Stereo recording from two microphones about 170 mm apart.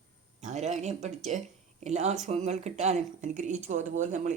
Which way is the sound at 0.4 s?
45° right (ahead or behind).